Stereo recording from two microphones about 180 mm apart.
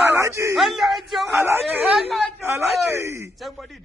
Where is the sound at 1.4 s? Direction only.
15° right (ahead or behind).